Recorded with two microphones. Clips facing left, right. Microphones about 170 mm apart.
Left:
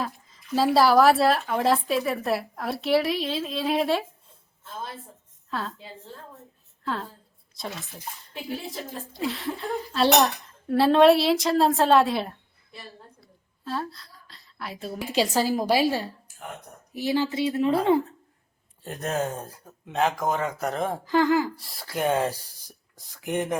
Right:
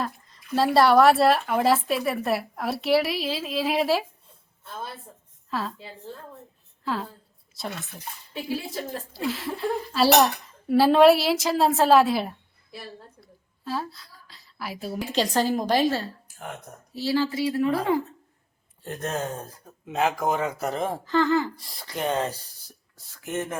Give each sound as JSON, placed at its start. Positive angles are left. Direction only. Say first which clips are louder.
{"t": 0.0, "sound": "speech", "louder": "right 1 dB", "side_deg": 0}
{"t": 5.5, "sound": "a woman's voice", "louder": "right 2 dB", "side_deg": 0}
{"t": 6.8, "sound": "a woman's voice", "louder": "right 2 dB", "side_deg": 0}
{"t": 13.2, "sound": "a sound", "louder": "right 1 dB", "side_deg": 0}
{"t": 15.1, "sound": "speech", "louder": "even", "side_deg": 10}
{"t": 19.9, "sound": "speech", "louder": "even", "side_deg": -5}
{"t": 21.0, "sound": "speech", "louder": "left 1 dB", "side_deg": 15}